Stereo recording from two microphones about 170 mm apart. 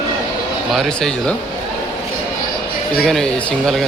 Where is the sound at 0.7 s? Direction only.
Centre (ahead or behind).